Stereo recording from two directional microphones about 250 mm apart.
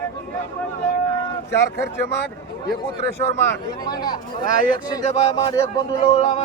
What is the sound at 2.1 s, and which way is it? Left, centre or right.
Speech, left.